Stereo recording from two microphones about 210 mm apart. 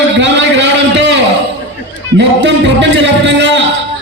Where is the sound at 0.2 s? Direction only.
55° right (ahead or behind).